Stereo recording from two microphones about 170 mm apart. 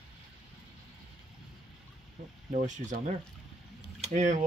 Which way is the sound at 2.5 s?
45° right (ahead or behind).